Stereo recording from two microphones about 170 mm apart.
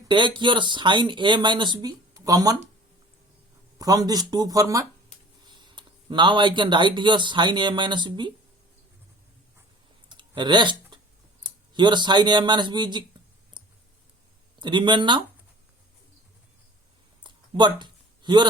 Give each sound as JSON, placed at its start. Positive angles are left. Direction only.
{"t": 0.1, "sound": "speech", "side_deg": -30}
{"t": 3.8, "sound": "speech", "side_deg": -20}
{"t": 10.1, "sound": "a sound", "side_deg": -30}
{"t": 11.4, "sound": "speech", "side_deg": -25}
{"t": 13.6, "sound": "clicking", "side_deg": -25}
{"t": 14.6, "sound": "speech", "side_deg": -25}
{"t": 17.2, "sound": "a sound", "side_deg": -25}